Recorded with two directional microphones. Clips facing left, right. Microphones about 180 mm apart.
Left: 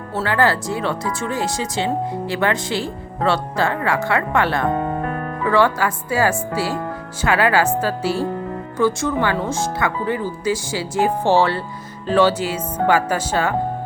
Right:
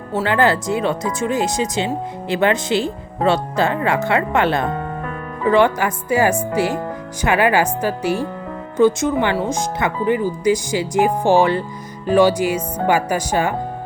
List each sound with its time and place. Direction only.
0.2 s speech: 20° right (ahead or behind)